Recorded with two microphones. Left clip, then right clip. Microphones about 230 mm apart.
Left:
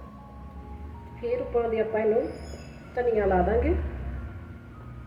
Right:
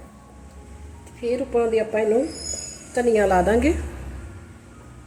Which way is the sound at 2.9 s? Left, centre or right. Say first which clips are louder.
Right 6 dB; right.